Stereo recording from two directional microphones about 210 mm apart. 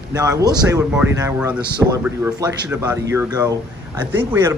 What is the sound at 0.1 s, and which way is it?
Speech, 15° right (ahead or behind).